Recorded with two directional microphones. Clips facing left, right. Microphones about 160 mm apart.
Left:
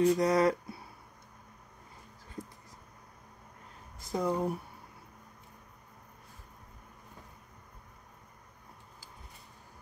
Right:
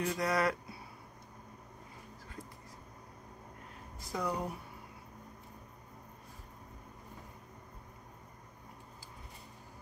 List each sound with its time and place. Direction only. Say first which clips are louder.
0.0 s speech: left 7 dB; 20° left (ahead or behind)
2.4 s a sound: left 6 dB; 20° left (ahead or behind)
4.1 s speech: left 5 dB; 25° left (ahead or behind)